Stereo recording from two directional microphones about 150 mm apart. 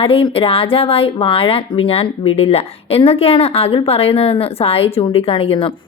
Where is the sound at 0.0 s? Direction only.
40° left (ahead or behind).